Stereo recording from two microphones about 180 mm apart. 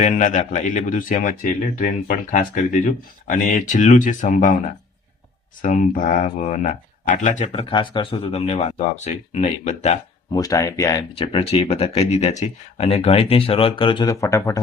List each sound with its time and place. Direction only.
0.0 s speech: 45° left (ahead or behind)
10.3 s speech: 20° left (ahead or behind)
11.1 s speech: 30° left (ahead or behind)